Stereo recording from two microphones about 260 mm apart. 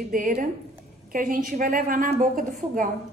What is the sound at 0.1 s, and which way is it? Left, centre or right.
A woman's voice, right.